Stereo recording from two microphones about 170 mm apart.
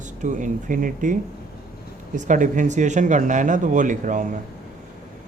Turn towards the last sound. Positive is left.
turn(degrees=-50)  # may be behind; listen again after turning